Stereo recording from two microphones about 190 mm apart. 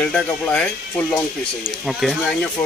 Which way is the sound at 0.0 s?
5° left (ahead or behind).